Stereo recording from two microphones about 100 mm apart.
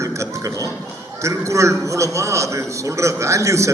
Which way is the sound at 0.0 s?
30° right (ahead or behind).